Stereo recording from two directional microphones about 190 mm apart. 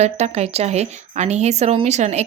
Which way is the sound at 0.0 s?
35° right (ahead or behind).